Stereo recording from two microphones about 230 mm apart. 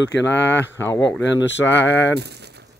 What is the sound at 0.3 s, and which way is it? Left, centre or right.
Speech, centre.